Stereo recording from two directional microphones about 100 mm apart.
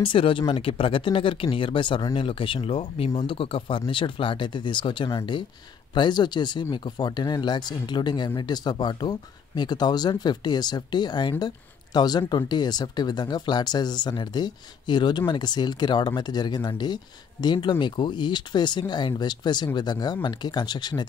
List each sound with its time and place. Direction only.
0.0 s speech: 60° left (ahead or behind)